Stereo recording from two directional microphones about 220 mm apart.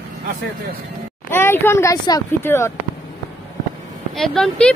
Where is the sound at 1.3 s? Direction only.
10° left (ahead or behind).